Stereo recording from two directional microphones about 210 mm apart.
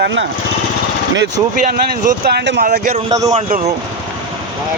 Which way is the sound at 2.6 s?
45° right (ahead or behind).